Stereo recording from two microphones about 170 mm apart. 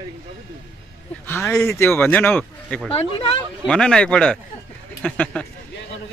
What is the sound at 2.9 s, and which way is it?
Speech, 35° left (ahead or behind).